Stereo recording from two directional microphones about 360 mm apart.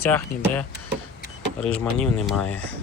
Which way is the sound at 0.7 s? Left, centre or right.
Right.